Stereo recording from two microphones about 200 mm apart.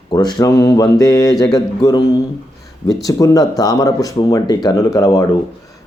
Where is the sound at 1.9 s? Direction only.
20° left (ahead or behind).